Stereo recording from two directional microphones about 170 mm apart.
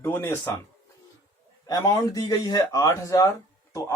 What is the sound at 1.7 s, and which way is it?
Speech, 20° left (ahead or behind).